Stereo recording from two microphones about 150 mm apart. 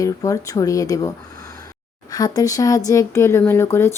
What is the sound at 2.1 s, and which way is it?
Speech, 25° left (ahead or behind).